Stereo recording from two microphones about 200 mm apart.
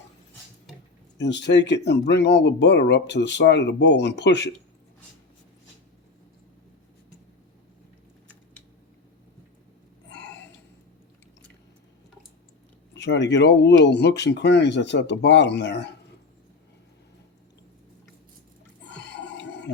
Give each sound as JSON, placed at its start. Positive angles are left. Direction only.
{"t": 1.2, "sound": "speech", "side_deg": 60}
{"t": 12.9, "sound": "speech", "side_deg": 60}
{"t": 18.9, "sound": "a sound", "side_deg": 60}